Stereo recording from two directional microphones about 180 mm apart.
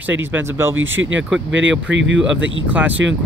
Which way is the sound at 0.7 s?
90° right.